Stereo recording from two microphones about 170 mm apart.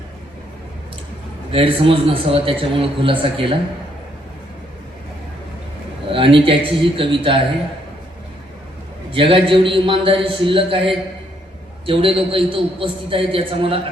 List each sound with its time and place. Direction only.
1.5 s a man's voice: 30° right (ahead or behind)
6.1 s a man's voice: 30° right (ahead or behind)
9.1 s a man's voice: 30° right (ahead or behind)